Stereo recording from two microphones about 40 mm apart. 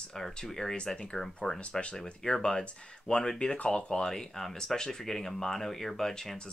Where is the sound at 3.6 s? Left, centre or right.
Left.